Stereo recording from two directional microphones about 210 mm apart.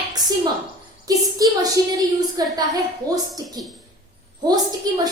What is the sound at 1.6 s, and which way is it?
Speech, 15° right (ahead or behind).